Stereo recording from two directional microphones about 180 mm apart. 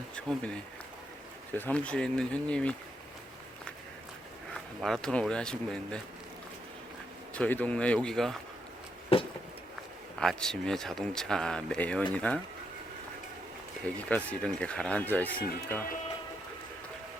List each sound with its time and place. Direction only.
0.2 s speech: 5° left (ahead or behind)
4.8 s speech: 5° left (ahead or behind)
7.3 s speech: 10° left (ahead or behind)
9.1 s a sound: 30° left (ahead or behind)
10.2 s speech: 5° left (ahead or behind)
13.8 s speech: 5° left (ahead or behind)